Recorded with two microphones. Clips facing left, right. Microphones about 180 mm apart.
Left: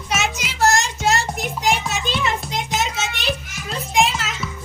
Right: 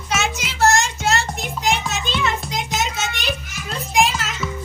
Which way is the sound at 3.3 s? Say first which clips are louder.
Left 1 dB; centre (ahead or behind).